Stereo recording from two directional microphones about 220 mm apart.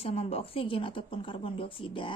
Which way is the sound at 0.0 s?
25° left (ahead or behind).